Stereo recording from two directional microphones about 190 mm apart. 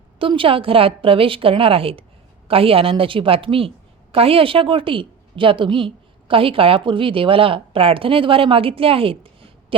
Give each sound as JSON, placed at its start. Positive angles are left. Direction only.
{"t": 0.2, "sound": "a woman's voice", "side_deg": -25}